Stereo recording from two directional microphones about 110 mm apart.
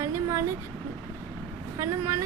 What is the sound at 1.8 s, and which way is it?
Speech, 25° right (ahead or behind).